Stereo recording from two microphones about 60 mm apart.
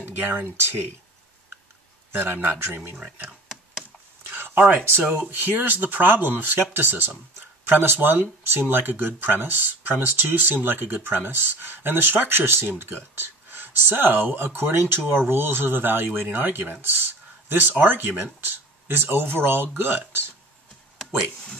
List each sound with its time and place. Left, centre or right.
0.0 s speech: right
2.1 s speech: right
4.2 s a sound: right
4.6 s speech: right